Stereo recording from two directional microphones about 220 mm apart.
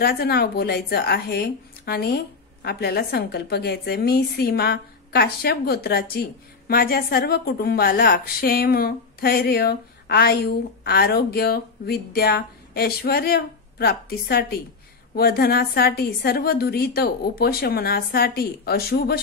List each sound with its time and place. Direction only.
0.0 s a woman's voice: 45° left (ahead or behind)